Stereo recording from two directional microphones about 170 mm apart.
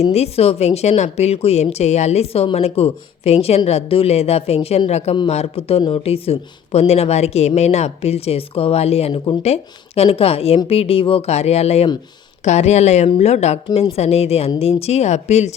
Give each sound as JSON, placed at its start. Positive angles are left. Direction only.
{"t": 0.0, "sound": "a woman's voice", "side_deg": 40}